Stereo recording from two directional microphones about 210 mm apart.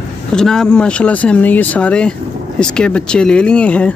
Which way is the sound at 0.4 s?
Centre (ahead or behind).